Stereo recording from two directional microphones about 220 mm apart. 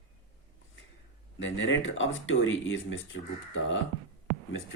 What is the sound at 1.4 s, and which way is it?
Speech, 60° left (ahead or behind).